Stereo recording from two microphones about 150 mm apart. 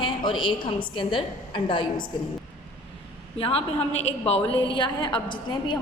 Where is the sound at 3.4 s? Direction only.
40° left (ahead or behind).